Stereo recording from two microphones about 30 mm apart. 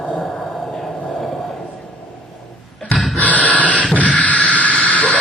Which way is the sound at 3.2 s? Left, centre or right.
Left.